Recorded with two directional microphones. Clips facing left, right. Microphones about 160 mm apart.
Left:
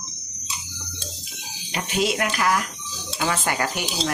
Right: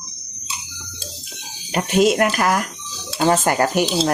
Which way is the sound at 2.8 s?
15° left (ahead or behind).